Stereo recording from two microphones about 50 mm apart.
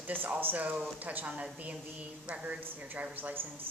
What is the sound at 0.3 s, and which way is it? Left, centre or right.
A woman's voice, right.